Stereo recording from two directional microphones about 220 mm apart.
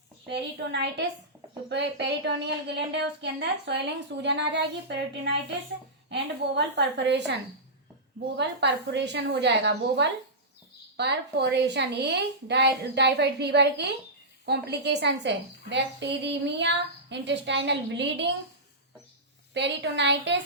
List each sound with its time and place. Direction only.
0.3 s a woman's voice: 50° right (ahead or behind)
8.4 s a woman's voice: 50° right (ahead or behind)
19.5 s a woman's voice: 55° right (ahead or behind)